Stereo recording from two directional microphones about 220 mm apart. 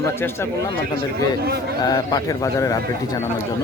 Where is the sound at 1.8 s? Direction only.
15° left (ahead or behind).